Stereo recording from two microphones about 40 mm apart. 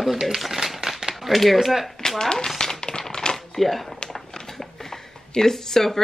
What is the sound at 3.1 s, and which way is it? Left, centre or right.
Typewriter, centre.